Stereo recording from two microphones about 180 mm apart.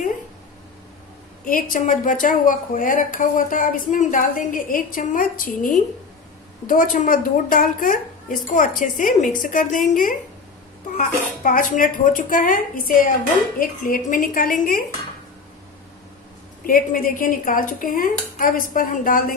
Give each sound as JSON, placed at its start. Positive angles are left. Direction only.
{"t": 1.4, "sound": "a woman's voice", "side_deg": 50}
{"t": 6.7, "sound": "a woman's voice", "side_deg": 50}
{"t": 16.6, "sound": "a woman's voice", "side_deg": 50}